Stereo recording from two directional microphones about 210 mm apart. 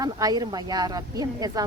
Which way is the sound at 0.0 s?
15° right (ahead or behind).